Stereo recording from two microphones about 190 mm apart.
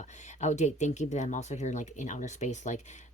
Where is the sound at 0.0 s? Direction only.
40° left (ahead or behind).